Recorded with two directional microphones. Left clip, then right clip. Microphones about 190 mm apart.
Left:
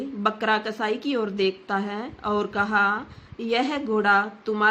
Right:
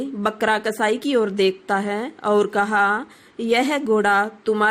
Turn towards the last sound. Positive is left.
turn(degrees=-30)  # may be behind; listen again after turning